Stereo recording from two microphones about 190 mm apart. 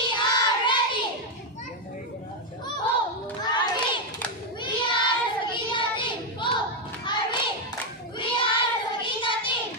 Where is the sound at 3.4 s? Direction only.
25° left (ahead or behind).